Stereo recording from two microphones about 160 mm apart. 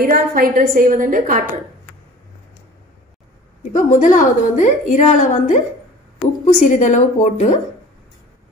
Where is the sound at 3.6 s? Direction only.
50° left (ahead or behind).